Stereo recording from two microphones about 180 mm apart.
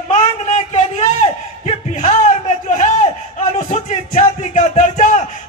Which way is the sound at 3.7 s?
40° left (ahead or behind).